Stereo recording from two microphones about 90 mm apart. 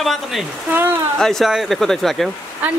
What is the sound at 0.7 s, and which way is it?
Speech, 25° right (ahead or behind).